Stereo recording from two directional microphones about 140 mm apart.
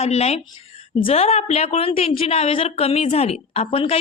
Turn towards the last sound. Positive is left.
turn(degrees=45)  # may be behind; listen again after turning